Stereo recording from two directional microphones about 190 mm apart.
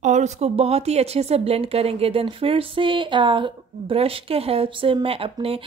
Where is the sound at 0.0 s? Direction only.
40° right (ahead or behind).